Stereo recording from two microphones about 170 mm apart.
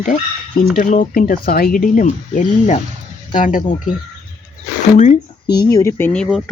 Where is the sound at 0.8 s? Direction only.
55° left (ahead or behind).